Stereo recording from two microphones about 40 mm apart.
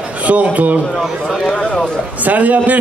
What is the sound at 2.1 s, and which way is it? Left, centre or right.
Speech, right.